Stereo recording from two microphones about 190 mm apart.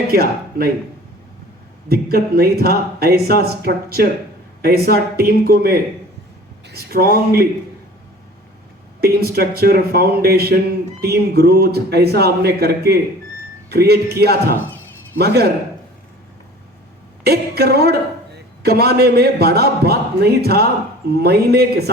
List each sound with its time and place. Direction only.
0.1 s speech: 55° right (ahead or behind)
1.9 s speech: 55° right (ahead or behind)
9.0 s a man's voice: 55° right (ahead or behind)
17.2 s a woman's voice: 55° right (ahead or behind)